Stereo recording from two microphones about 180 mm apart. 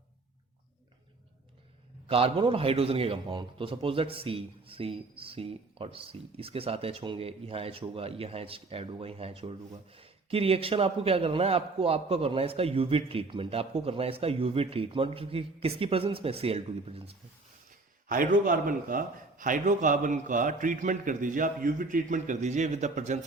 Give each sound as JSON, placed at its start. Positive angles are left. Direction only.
{"t": 2.0, "sound": "a man's voice", "side_deg": -30}
{"t": 18.1, "sound": "a man's voice", "side_deg": -50}